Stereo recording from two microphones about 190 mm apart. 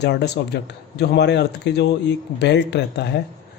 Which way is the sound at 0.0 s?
65° left (ahead or behind).